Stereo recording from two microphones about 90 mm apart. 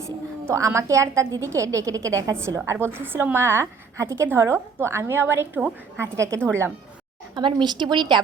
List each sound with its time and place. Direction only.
0.0 s a woman's voice: 35° right (ahead or behind)
2.7 s a woman's voice: 25° right (ahead or behind)
7.3 s a woman's voice: 55° right (ahead or behind)